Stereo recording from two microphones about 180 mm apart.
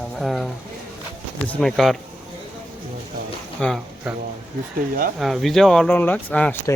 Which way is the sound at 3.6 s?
5° left (ahead or behind).